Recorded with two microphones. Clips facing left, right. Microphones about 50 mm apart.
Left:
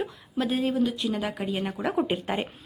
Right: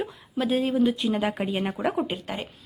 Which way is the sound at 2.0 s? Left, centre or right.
Centre.